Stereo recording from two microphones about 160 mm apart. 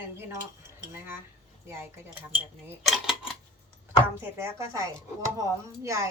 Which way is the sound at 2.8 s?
Centre (ahead or behind).